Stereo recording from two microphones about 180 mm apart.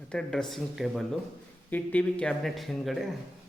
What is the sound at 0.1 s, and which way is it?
Speech, 5° left (ahead or behind).